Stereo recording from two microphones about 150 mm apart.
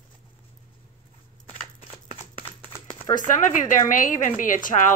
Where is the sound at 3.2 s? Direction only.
60° left (ahead or behind).